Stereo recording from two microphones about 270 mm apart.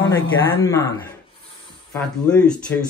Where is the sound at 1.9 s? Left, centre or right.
Centre.